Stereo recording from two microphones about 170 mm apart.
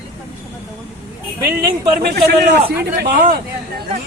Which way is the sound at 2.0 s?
70° right (ahead or behind).